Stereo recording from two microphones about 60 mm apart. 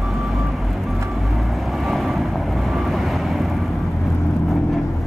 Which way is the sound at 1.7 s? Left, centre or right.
Centre.